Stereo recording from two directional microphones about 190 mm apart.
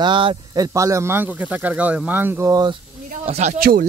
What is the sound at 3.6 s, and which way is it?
Speech, 50° right (ahead or behind).